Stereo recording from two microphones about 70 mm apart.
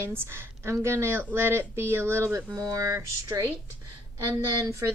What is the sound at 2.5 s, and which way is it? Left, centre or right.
Speech, right.